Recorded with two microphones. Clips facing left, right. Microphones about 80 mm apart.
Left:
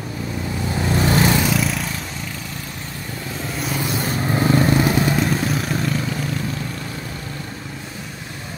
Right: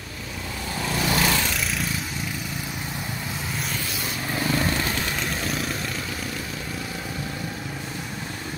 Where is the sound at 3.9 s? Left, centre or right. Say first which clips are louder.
Left 8 dB; left.